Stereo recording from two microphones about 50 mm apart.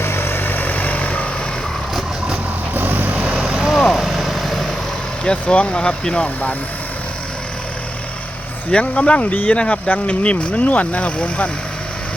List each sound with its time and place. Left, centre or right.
0.0 s vehicle: left
2.7 s vehicle: right
3.2 s vehicle: right
3.8 s vehicle: centre
4.0 s vehicle: centre
5.2 s speech: left
8.7 s speech: left
9.3 s speech: left
9.6 s speech: left